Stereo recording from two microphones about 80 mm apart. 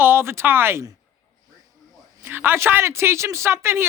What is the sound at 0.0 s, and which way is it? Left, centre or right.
Speech, right.